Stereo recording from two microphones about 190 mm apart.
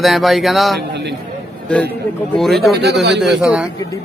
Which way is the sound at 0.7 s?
65° right (ahead or behind).